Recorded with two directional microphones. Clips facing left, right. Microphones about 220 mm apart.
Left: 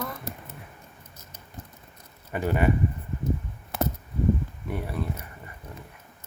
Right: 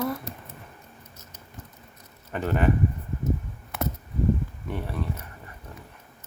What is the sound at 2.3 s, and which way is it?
Speech, 10° left (ahead or behind).